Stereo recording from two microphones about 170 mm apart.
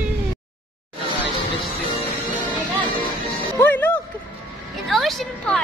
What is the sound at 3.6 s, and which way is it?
Music, 10° left (ahead or behind).